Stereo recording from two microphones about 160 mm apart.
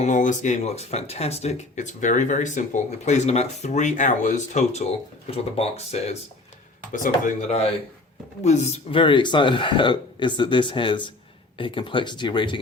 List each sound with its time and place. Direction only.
0.0 s speech: 50° left (ahead or behind)
6.9 s speech: 50° left (ahead or behind)
9.0 s speech: 30° left (ahead or behind)